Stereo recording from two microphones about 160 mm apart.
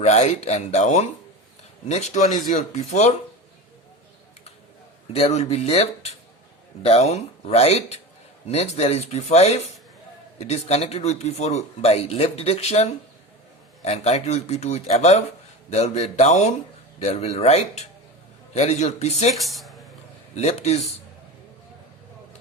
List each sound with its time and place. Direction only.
0.0 s speech: 45° left (ahead or behind)
5.1 s speech: 40° left (ahead or behind)
19.3 s speech: centre (ahead or behind)
20.3 s speech: 45° left (ahead or behind)